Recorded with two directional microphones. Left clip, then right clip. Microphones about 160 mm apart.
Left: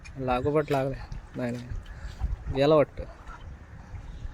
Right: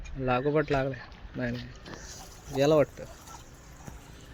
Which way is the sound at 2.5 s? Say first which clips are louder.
Left 2 dB; 5° left (ahead or behind).